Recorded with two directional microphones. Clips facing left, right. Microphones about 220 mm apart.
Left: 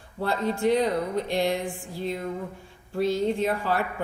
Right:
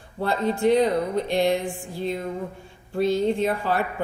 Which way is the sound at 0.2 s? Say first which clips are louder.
Right 3 dB; 25° right (ahead or behind).